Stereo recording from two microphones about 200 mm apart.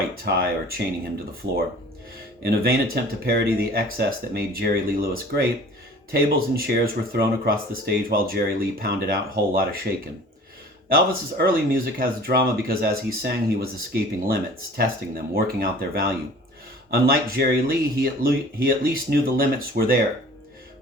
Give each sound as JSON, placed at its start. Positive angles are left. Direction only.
{"t": 0.3, "sound": "speech", "side_deg": -50}
{"t": 2.4, "sound": "speech", "side_deg": -50}
{"t": 10.8, "sound": "speech", "side_deg": -50}